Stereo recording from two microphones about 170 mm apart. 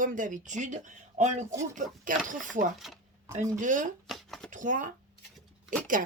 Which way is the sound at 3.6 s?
50° right (ahead or behind).